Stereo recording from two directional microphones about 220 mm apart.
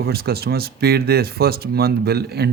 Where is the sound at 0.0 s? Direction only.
45° right (ahead or behind).